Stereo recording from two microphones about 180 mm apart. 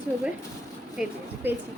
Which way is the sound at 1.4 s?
10° right (ahead or behind).